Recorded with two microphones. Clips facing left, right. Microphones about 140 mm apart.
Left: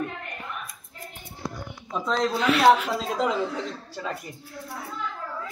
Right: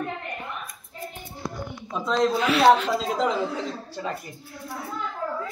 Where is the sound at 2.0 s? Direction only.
10° right (ahead or behind).